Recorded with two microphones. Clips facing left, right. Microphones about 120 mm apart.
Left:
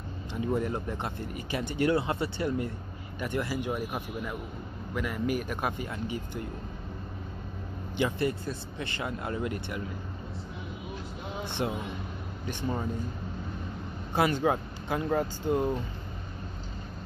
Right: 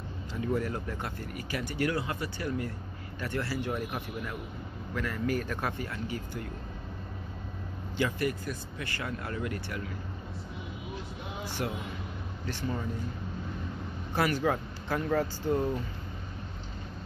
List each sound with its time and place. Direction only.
0.3 s speech: 20° left (ahead or behind)
8.0 s speech: 25° left (ahead or behind)
11.4 s speech: 25° left (ahead or behind)
14.1 s speech: 20° left (ahead or behind)